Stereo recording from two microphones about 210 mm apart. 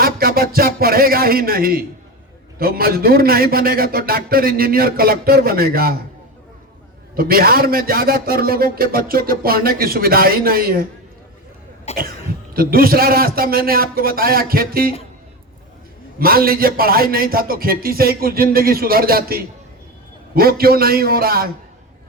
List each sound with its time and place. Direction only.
0.0 s a sound: 45° right (ahead or behind)
2.6 s a man's voice: 45° right (ahead or behind)
7.2 s a man's voice: 45° right (ahead or behind)
11.9 s cough: 30° left (ahead or behind)
12.5 s a man's voice: 45° right (ahead or behind)
16.1 s a man's voice: 45° right (ahead or behind)